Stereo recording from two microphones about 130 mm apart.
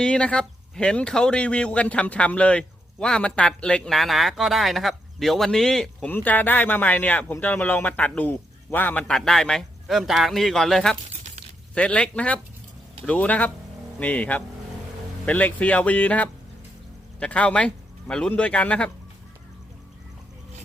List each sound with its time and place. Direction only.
0.0 s speech: 10° left (ahead or behind)
11.1 s a sound: 60° right (ahead or behind)
11.7 s speech: 10° left (ahead or behind)